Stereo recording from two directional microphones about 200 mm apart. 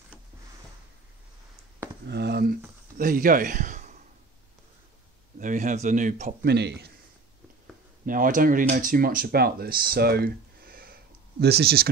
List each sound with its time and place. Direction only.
2.0 s a man's voice: 55° right (ahead or behind); by 4.0 s 40° right (ahead or behind)
5.4 s speech: 40° right (ahead or behind)
6.4 s a man's voice: 55° right (ahead or behind)
8.0 s speech: 45° right (ahead or behind)